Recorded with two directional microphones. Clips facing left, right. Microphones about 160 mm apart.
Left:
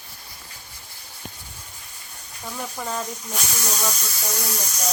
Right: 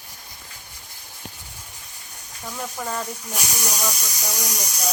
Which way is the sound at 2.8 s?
Centre (ahead or behind).